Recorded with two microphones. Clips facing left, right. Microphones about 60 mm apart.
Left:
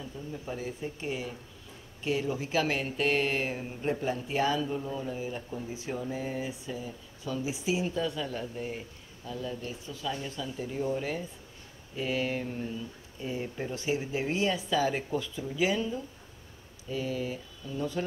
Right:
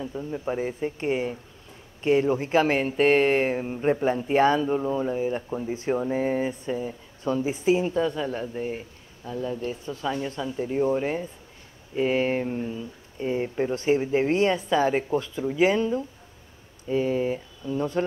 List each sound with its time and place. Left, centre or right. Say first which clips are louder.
0.0 s speech: right 9 dB; right
3.5 s speech: right 8 dB; right